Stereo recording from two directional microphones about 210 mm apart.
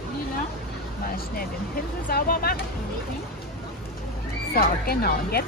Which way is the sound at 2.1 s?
45° left (ahead or behind).